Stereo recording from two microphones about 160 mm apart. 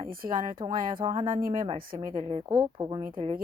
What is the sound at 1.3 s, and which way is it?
Speech, 65° right (ahead or behind).